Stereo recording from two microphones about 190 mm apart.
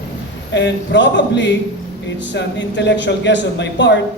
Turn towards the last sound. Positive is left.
turn(degrees=70)  # may be behind; listen again after turning